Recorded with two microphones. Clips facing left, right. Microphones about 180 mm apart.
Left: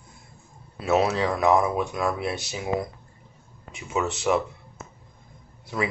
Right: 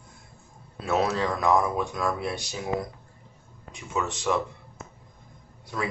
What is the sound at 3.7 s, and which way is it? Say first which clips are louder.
A man's voice: left 3 dB; 5° left (ahead or behind).